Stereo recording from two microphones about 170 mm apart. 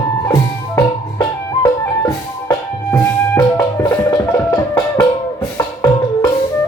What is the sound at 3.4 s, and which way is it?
Music, 20° left (ahead or behind).